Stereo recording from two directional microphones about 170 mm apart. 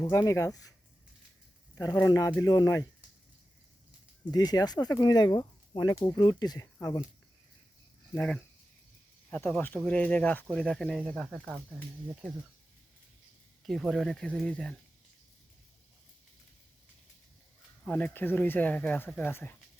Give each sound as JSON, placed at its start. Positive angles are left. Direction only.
{"t": 0.0, "sound": "speech", "side_deg": 15}
{"t": 1.7, "sound": "speech", "side_deg": 20}
{"t": 4.3, "sound": "speech", "side_deg": 25}
{"t": 8.1, "sound": "speech", "side_deg": 10}
{"t": 13.7, "sound": "speech", "side_deg": 0}
{"t": 17.8, "sound": "speech", "side_deg": 10}